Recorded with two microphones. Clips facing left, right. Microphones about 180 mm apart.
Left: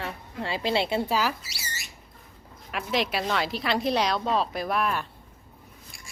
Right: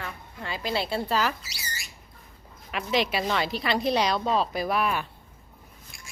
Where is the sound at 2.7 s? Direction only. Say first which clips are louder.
Right 1 dB; centre (ahead or behind).